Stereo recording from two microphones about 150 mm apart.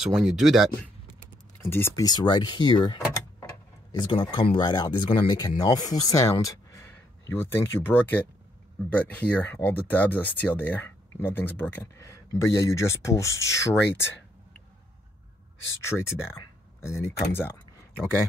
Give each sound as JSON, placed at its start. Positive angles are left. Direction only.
{"t": 0.0, "sound": "speech", "side_deg": -5}
{"t": 1.6, "sound": "speech", "side_deg": 15}
{"t": 15.8, "sound": "speech", "side_deg": 15}